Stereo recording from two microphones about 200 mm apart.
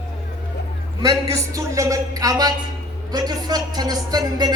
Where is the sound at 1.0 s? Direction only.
15° right (ahead or behind).